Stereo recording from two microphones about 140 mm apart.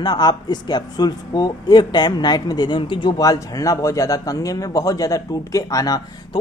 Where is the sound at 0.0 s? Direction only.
30° left (ahead or behind).